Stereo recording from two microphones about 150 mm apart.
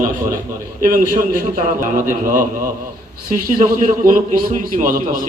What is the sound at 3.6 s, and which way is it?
A man's voice, 65° right (ahead or behind).